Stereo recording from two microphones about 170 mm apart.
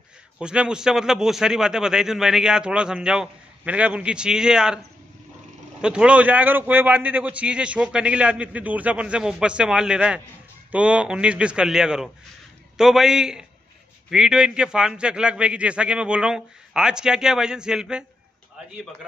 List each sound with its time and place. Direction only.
0.4 s a man's voice: 5° right (ahead or behind)
5.8 s a man's voice: 5° right (ahead or behind)